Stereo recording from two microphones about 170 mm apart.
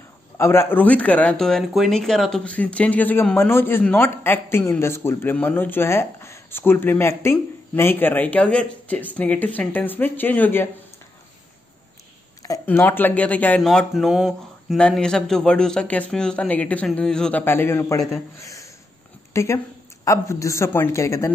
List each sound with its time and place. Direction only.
0.4 s speech: 15° left (ahead or behind)
12.4 s speech: 15° left (ahead or behind)